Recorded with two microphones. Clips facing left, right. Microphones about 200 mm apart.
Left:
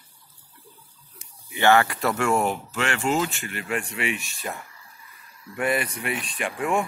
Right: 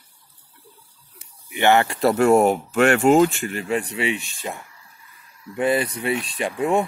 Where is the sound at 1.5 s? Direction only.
20° right (ahead or behind).